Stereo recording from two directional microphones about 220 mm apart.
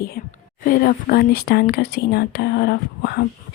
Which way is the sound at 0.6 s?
40° left (ahead or behind).